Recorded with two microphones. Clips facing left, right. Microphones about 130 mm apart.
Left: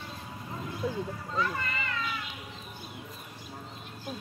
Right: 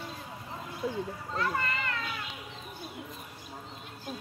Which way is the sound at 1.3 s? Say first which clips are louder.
Right 1 dB; 65° right (ahead or behind).